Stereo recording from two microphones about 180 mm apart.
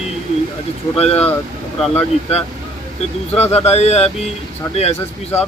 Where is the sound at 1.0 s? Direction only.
35° left (ahead or behind).